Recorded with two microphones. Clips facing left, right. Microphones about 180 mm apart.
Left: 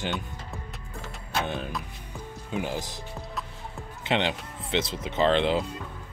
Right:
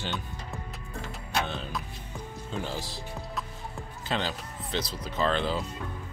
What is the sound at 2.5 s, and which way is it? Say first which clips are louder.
Speech: left 4 dB; 15° left (ahead or behind).